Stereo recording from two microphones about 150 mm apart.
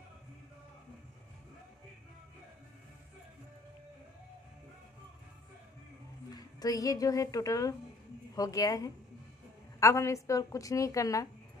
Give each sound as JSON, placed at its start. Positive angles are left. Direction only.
{"t": 6.3, "sound": "a woman's voice", "side_deg": 25}